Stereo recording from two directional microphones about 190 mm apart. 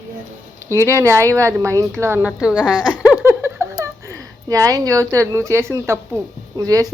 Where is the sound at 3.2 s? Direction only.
10° right (ahead or behind).